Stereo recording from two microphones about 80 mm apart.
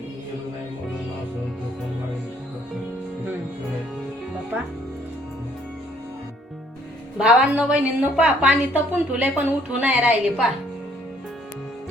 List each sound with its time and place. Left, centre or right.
4.5 s music: right
7.2 s a woman's voice: centre